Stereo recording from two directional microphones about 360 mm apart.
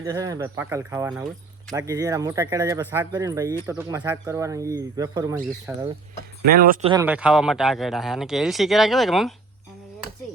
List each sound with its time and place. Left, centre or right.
0.0 s speech: centre
6.4 s speech: right
6.9 s speech: centre